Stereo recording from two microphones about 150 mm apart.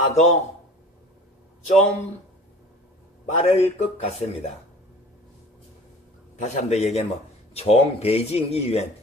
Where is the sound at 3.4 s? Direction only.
45° left (ahead or behind).